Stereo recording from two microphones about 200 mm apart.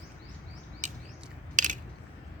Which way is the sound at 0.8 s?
40° right (ahead or behind).